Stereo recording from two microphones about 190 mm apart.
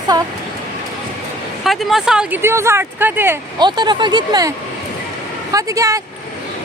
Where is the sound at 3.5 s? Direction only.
25° right (ahead or behind).